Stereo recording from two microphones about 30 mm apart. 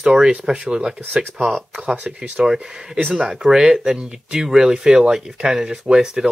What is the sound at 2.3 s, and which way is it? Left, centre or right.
Speech, right.